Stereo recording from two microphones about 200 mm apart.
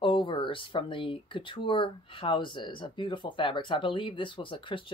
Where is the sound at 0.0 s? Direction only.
25° left (ahead or behind).